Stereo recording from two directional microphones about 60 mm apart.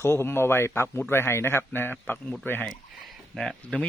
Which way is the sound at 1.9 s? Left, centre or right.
Left.